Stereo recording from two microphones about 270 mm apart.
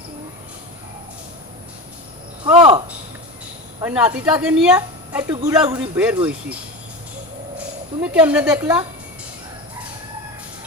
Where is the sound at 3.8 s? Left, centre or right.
Centre.